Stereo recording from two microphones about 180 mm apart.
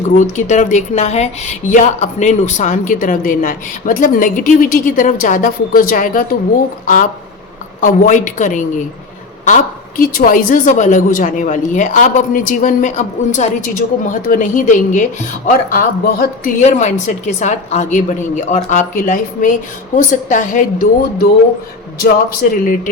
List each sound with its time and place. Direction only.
0.2 s speech: 40° left (ahead or behind)
10.0 s speech: 50° left (ahead or behind)
21.9 s speech: 55° left (ahead or behind)